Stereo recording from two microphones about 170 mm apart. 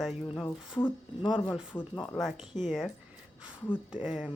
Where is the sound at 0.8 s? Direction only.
15° left (ahead or behind).